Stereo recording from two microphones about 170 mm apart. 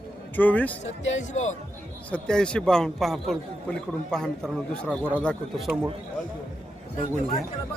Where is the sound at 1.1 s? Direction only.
45° left (ahead or behind).